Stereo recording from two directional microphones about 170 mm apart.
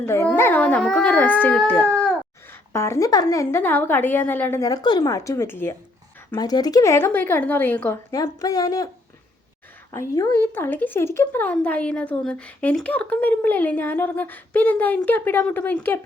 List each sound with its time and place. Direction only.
0.0 s a woman's voice: 15° left (ahead or behind)
9.9 s a woman's voice: 20° left (ahead or behind)